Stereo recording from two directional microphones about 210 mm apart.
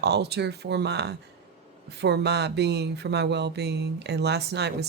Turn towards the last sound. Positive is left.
turn(degrees=-50)  # may be behind; listen again after turning